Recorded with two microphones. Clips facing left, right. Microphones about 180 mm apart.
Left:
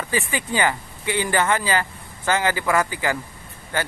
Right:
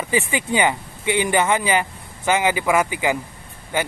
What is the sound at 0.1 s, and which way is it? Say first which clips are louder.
Speech: right 4 dB; 20° right (ahead or behind).